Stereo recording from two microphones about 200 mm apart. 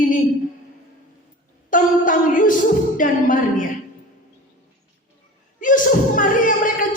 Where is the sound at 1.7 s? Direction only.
40° left (ahead or behind).